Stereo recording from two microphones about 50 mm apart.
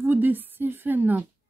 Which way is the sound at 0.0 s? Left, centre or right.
Right.